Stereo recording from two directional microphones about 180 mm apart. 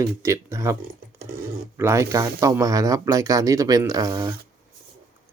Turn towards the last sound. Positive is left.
turn(degrees=-20)  # may be behind; listen again after turning